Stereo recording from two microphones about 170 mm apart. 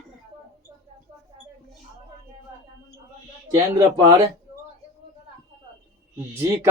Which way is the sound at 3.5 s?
15° right (ahead or behind).